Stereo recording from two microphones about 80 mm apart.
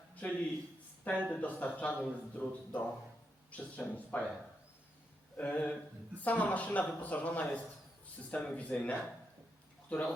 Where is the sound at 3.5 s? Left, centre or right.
Centre.